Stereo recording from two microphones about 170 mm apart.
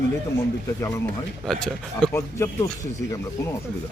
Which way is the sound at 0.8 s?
20° left (ahead or behind).